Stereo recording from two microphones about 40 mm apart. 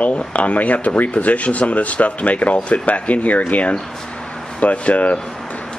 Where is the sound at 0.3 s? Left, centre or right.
Left.